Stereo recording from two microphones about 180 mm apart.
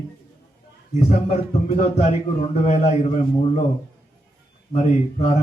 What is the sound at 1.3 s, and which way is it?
A man's voice, 40° left (ahead or behind).